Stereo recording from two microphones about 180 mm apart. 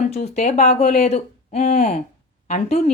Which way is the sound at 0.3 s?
40° left (ahead or behind).